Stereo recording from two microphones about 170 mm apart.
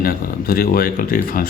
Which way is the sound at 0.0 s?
60° left (ahead or behind).